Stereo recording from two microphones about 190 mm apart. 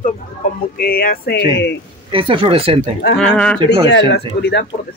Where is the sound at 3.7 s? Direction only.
65° left (ahead or behind).